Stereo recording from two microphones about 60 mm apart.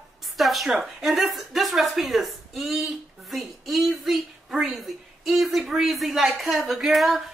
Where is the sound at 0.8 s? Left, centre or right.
Centre.